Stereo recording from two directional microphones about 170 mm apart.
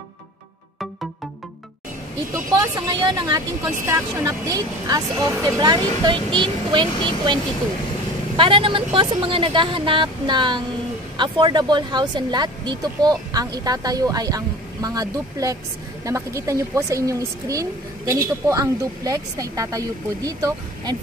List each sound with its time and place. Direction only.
2.5 s speech: 25° right (ahead or behind)
8.4 s speech: 30° right (ahead or behind)